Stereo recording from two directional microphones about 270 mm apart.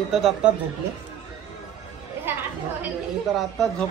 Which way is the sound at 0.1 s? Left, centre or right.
Centre.